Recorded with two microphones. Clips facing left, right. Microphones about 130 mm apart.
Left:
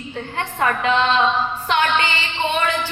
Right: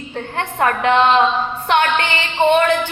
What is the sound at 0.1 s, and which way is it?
Music, 55° right (ahead or behind).